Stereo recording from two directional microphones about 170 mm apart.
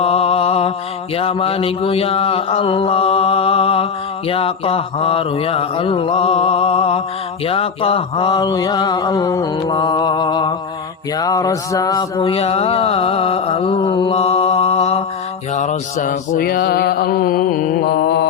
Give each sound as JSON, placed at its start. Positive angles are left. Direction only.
{"t": 0.0, "sound": "mantra", "side_deg": 35}
{"t": 7.4, "sound": "a sound", "side_deg": 35}
{"t": 12.2, "sound": "mantra", "side_deg": 35}
{"t": 15.5, "sound": "music", "side_deg": 45}